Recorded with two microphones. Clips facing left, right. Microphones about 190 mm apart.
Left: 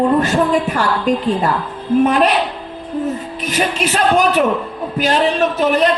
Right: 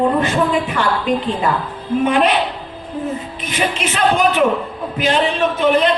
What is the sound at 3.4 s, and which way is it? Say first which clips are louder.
Speech: left 3 dB; 40° left (ahead or behind).